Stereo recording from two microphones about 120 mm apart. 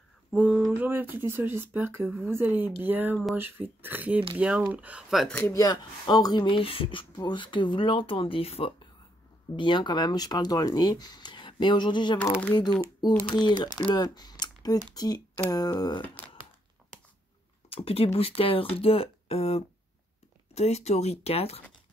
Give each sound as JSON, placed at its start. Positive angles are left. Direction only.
{"t": 0.3, "sound": "speech", "side_deg": -5}
{"t": 5.5, "sound": "speech", "side_deg": 30}
{"t": 9.6, "sound": "speech", "side_deg": 40}
{"t": 13.2, "sound": "speech", "side_deg": 40}
{"t": 17.6, "sound": "speech", "side_deg": 55}